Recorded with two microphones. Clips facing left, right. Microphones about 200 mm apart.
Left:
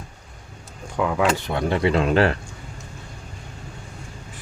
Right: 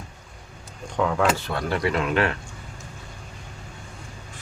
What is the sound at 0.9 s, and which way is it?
Speech, 5° left (ahead or behind).